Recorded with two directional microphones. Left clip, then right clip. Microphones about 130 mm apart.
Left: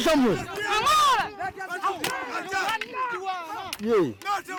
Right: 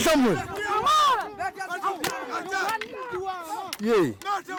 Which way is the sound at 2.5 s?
Centre (ahead or behind).